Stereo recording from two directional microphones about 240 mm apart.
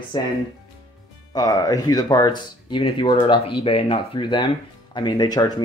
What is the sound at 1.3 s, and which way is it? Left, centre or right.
Speech, centre.